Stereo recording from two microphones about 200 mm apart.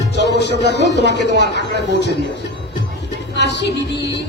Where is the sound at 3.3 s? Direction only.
60° left (ahead or behind).